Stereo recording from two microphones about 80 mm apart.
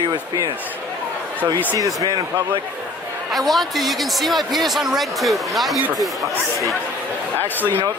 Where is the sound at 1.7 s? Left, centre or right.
Right.